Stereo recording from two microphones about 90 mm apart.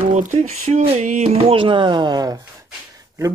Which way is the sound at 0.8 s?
90° right.